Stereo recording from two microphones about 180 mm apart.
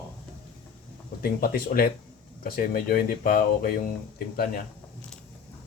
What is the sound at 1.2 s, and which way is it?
Speech, 55° left (ahead or behind).